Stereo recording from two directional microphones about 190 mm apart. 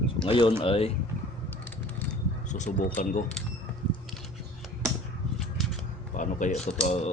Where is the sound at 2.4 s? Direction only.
40° left (ahead or behind).